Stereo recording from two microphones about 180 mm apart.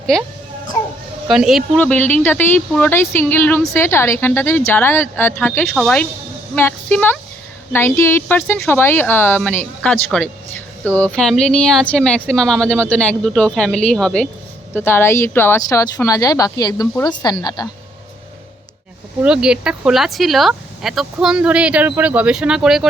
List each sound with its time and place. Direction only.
1.3 s speech: centre (ahead or behind)
1.8 s speech: 10° left (ahead or behind)
19.2 s speech: 5° right (ahead or behind)